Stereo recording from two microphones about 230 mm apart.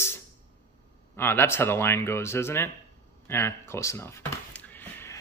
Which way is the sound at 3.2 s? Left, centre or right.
Centre.